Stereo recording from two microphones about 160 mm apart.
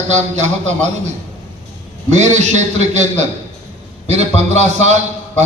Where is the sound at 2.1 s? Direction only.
45° right (ahead or behind).